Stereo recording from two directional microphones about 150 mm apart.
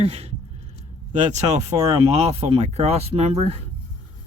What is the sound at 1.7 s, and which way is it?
Speech, 25° right (ahead or behind).